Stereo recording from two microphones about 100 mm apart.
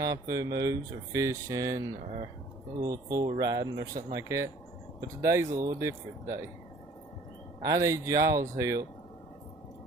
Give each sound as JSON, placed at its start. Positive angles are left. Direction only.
{"t": 0.0, "sound": "speech", "side_deg": -35}
{"t": 7.6, "sound": "speech", "side_deg": -35}